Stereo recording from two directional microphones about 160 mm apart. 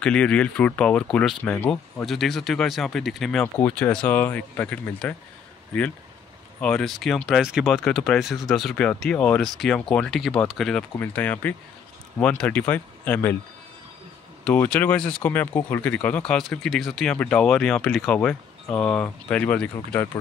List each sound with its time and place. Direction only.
0.0 s speech: 5° left (ahead or behind)
6.6 s speech: 5° left (ahead or behind)
14.4 s speech: 10° left (ahead or behind)